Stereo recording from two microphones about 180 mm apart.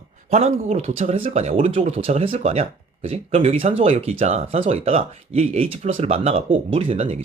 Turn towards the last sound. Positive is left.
turn(degrees=-30)  # may be behind; listen again after turning